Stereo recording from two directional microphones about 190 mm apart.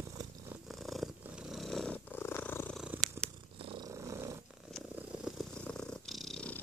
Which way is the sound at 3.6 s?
25° right (ahead or behind).